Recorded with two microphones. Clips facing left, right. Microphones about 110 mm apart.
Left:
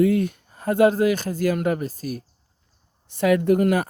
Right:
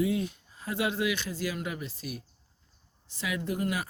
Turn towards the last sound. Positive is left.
turn(degrees=55)  # may be behind; listen again after turning